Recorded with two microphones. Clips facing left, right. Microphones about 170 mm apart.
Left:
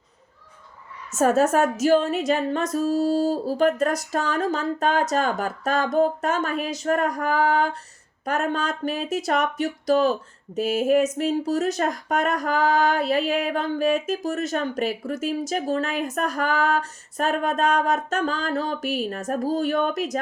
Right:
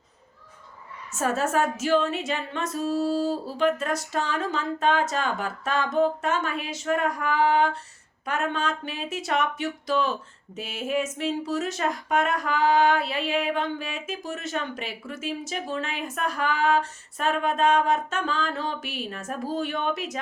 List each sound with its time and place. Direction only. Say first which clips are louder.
1.1 s speech: left 6 dB; 45° left (ahead or behind)